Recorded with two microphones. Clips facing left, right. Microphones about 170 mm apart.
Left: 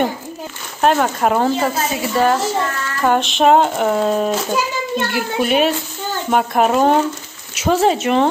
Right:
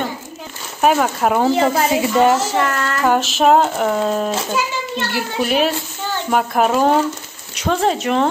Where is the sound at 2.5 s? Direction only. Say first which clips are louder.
Right 3 dB; 75° right (ahead or behind).